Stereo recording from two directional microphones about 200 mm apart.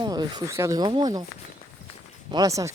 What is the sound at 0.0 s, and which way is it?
Speech, 20° right (ahead or behind).